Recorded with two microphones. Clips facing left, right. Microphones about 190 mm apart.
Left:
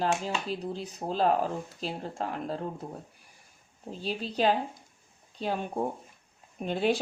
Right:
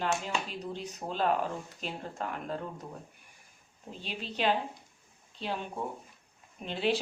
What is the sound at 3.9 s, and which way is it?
Speech, 35° left (ahead or behind).